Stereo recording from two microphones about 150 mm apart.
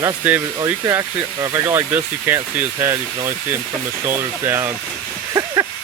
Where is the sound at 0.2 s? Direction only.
10° right (ahead or behind).